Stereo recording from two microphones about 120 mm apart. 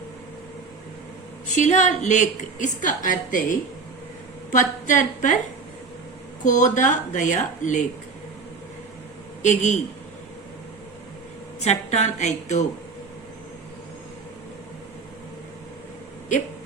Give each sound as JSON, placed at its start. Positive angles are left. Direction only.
{"t": 1.5, "sound": "a woman's voice", "side_deg": 90}
{"t": 6.4, "sound": "a woman's voice", "side_deg": 90}
{"t": 9.4, "sound": "a man's voice", "side_deg": 85}
{"t": 11.6, "sound": "a woman's voice", "side_deg": 70}